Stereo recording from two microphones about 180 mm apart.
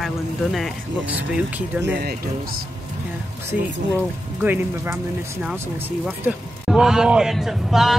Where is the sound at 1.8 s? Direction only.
65° right (ahead or behind).